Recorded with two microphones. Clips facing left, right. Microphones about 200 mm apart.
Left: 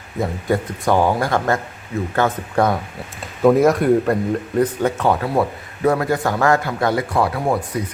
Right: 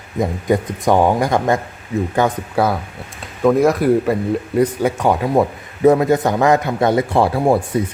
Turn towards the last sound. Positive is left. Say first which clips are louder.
# right 5 dB
turn(degrees=-30)  # may be behind; listen again after turning